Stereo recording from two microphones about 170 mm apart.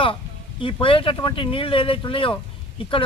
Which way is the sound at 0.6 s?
30° left (ahead or behind).